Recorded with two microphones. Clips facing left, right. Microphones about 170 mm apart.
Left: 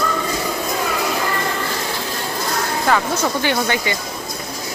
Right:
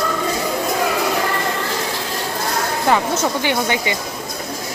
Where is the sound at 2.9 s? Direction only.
20° right (ahead or behind).